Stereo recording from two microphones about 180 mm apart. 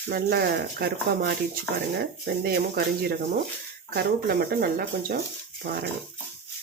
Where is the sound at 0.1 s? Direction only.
60° right (ahead or behind).